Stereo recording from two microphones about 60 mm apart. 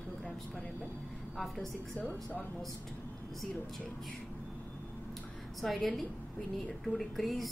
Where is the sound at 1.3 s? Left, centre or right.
Centre.